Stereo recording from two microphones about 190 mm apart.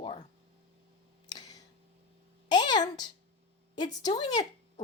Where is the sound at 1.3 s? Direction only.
20° left (ahead or behind).